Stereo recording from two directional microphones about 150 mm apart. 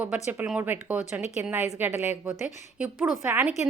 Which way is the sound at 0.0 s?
10° right (ahead or behind).